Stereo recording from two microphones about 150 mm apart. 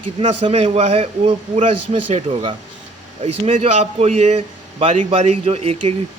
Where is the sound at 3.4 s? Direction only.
50° right (ahead or behind).